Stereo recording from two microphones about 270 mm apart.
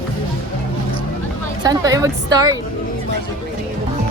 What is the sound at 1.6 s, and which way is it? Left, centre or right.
Speech, centre.